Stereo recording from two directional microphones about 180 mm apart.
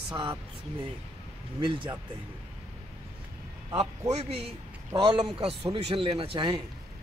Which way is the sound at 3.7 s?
35° right (ahead or behind).